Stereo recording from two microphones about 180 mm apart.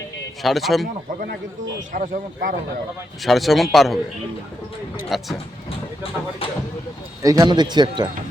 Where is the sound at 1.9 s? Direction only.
50° right (ahead or behind).